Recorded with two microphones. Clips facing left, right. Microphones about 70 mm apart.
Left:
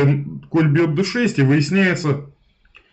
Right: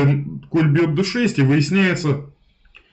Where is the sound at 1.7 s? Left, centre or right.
Centre.